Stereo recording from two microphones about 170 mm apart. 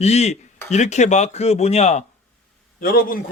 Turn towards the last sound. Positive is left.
turn(degrees=60)  # may be behind; listen again after turning